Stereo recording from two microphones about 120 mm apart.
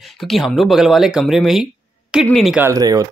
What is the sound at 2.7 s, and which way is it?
Speech, 30° right (ahead or behind).